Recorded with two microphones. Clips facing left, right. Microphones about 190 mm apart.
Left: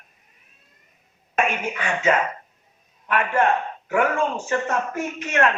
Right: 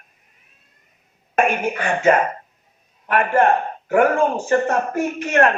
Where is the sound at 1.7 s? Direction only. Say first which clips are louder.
Right 4 dB; 35° right (ahead or behind).